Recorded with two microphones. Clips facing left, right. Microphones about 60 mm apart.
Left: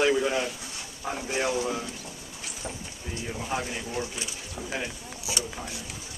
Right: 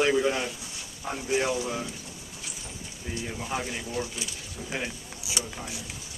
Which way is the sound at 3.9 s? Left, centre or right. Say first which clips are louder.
Even; left.